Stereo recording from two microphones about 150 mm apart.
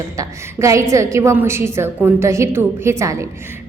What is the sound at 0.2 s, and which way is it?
A woman's voice, 20° right (ahead or behind).